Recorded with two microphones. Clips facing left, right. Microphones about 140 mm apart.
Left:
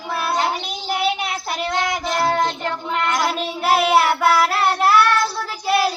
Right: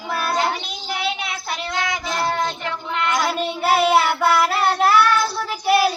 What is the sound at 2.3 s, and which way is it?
Child singing, 45° left (ahead or behind).